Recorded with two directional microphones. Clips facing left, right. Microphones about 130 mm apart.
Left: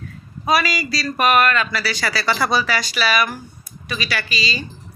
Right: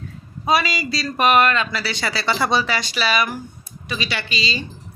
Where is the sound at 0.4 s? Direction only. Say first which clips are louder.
Left 1 dB; 25° right (ahead or behind).